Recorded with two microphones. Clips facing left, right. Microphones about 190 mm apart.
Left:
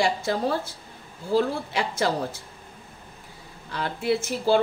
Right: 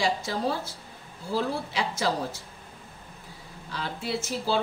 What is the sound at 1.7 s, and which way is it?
Speech, 55° left (ahead or behind).